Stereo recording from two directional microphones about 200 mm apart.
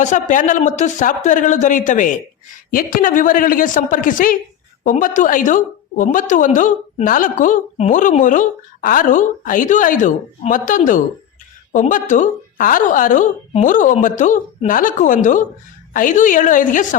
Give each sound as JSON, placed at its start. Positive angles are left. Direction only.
{"t": 0.0, "sound": "a woman's voice", "side_deg": 40}